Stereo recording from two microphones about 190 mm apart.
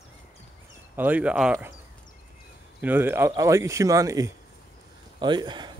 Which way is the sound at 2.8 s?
10° right (ahead or behind).